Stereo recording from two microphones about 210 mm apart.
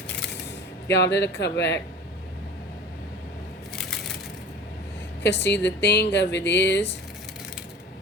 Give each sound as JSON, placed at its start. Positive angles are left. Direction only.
{"t": 0.9, "sound": "speech", "side_deg": 55}
{"t": 5.2, "sound": "speech", "side_deg": 55}